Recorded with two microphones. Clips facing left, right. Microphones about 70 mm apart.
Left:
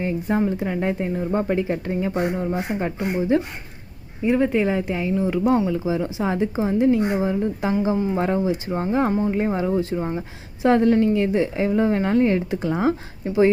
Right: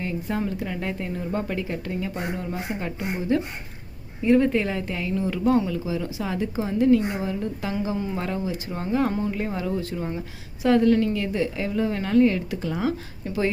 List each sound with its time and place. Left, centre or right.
0.0 s speech: left